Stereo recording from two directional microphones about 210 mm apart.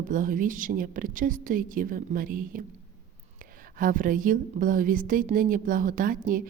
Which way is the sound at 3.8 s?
40° right (ahead or behind).